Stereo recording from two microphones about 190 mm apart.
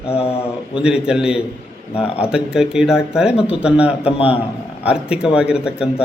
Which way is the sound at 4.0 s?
30° left (ahead or behind).